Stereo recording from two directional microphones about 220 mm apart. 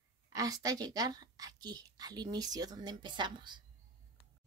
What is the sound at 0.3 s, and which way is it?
A woman's voice, 15° right (ahead or behind).